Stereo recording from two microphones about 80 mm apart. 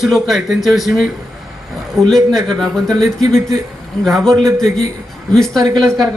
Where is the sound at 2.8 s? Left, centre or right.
Right.